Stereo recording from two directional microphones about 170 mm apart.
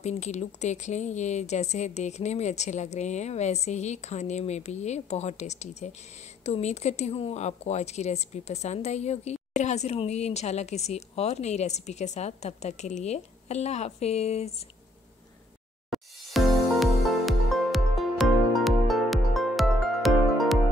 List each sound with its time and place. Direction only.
0.0 s speech: 40° left (ahead or behind)
15.9 s music: centre (ahead or behind)